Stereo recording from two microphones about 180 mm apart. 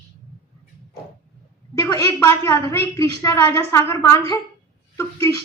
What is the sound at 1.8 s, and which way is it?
A man's voice, 15° left (ahead or behind).